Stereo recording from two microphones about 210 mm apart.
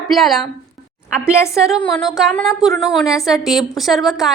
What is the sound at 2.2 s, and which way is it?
A woman's voice, centre (ahead or behind).